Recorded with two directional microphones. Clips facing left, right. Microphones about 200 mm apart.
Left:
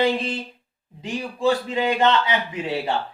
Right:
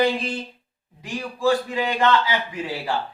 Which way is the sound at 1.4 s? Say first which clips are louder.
Even; 20° left (ahead or behind).